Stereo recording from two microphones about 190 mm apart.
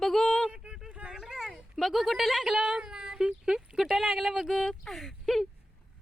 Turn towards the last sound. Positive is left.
turn(degrees=0)  # may be behind; listen again after turning